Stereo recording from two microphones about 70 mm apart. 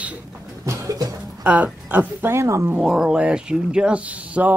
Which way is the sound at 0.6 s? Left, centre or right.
Right.